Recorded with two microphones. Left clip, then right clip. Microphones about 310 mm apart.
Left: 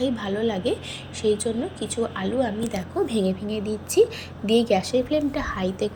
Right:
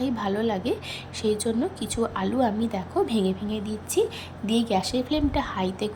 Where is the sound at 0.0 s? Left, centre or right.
Centre.